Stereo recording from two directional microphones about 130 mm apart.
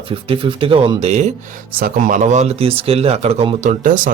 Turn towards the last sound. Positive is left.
turn(degrees=-90)